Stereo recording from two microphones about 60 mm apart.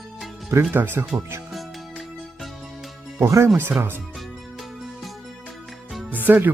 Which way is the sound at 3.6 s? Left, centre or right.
Right.